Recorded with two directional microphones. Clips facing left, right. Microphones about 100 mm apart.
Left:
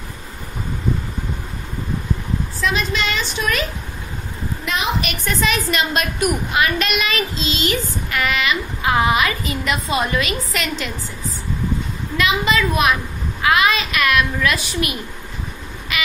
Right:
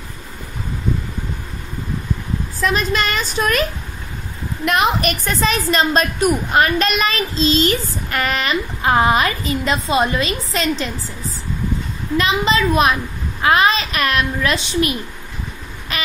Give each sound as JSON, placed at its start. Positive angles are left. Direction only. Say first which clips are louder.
{"t": 2.6, "sound": "a woman's voice", "louder": "right 3 dB", "side_deg": -45}
{"t": 4.6, "sound": "a woman's voice", "louder": "right 6 dB", "side_deg": -50}
{"t": 12.2, "sound": "a woman's voice", "louder": "right 1 dB", "side_deg": -30}